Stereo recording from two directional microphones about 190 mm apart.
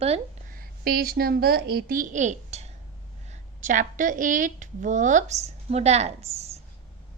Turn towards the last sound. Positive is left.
turn(degrees=-35)  # may be behind; listen again after turning